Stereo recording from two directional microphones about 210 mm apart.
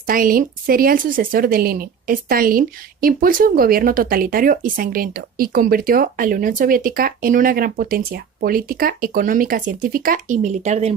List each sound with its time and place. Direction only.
0.1 s a woman's voice: 45° right (ahead or behind)